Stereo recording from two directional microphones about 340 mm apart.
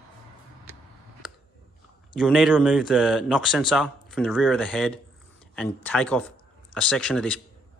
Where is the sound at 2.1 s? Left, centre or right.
Centre.